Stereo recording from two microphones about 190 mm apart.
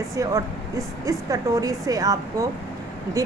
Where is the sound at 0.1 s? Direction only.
15° right (ahead or behind).